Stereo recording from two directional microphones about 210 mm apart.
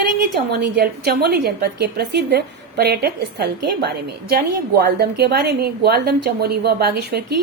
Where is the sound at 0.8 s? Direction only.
50° right (ahead or behind).